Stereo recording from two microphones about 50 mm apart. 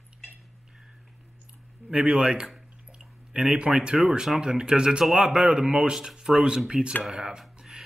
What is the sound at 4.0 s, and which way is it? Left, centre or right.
Speech, centre.